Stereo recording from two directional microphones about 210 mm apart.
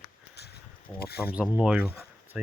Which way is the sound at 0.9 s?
50° left (ahead or behind).